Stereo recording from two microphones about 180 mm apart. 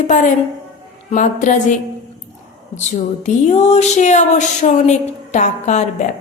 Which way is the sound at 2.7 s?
40° left (ahead or behind).